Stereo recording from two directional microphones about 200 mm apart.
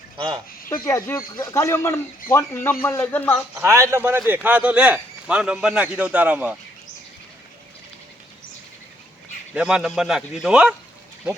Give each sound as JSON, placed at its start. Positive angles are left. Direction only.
{"t": 0.2, "sound": "speech", "side_deg": -20}
{"t": 0.7, "sound": "speech", "side_deg": 15}
{"t": 3.5, "sound": "a man's voice", "side_deg": -15}
{"t": 9.6, "sound": "a man's voice", "side_deg": -5}